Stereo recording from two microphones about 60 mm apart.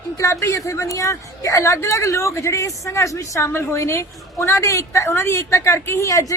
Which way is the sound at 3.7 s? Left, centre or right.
Left.